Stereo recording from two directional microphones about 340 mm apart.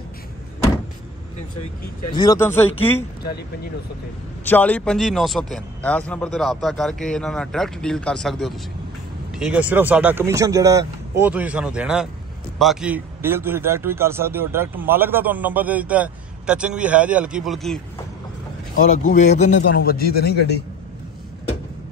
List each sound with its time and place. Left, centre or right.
2.1 s speech: centre
4.5 s speech: centre
19.0 s a man's voice: left